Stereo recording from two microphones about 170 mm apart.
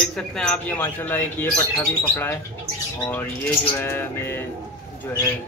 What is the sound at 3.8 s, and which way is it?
Speech, 15° left (ahead or behind).